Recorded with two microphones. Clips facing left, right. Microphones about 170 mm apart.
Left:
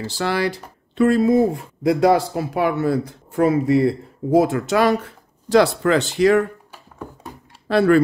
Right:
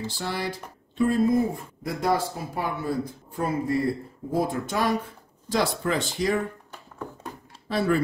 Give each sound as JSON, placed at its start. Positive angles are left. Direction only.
{"t": 0.0, "sound": "speech", "side_deg": 80}
{"t": 6.7, "sound": "a sound", "side_deg": 10}
{"t": 7.6, "sound": "speech", "side_deg": 75}